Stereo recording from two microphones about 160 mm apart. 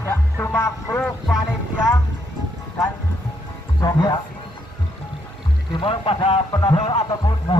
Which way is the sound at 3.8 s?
25° left (ahead or behind).